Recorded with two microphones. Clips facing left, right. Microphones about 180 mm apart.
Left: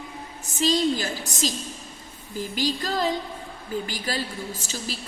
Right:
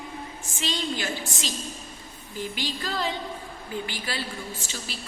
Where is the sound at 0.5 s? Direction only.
40° left (ahead or behind).